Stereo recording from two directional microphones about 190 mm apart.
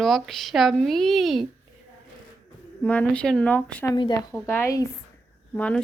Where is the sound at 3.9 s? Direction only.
25° left (ahead or behind); by 5.8 s 5° left (ahead or behind).